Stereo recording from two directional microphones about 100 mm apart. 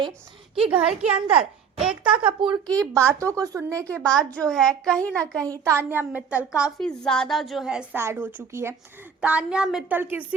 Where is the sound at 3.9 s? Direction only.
10° left (ahead or behind).